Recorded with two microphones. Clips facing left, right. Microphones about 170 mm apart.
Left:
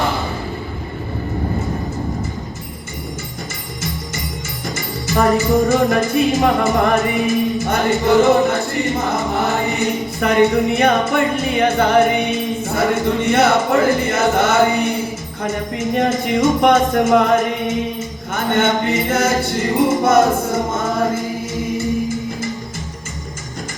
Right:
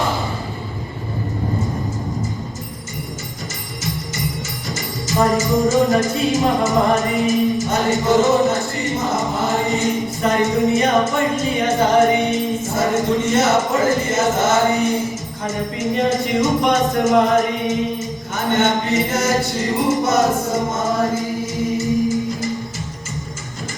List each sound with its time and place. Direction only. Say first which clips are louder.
5.0 s music: left 2 dB; 60° left (ahead or behind)
16.0 s music: left 1 dB; 55° left (ahead or behind)